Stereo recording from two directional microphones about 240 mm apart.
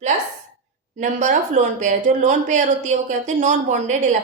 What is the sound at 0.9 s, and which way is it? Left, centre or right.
Speech, right.